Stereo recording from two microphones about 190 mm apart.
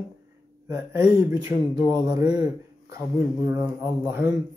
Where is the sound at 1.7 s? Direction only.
20° right (ahead or behind).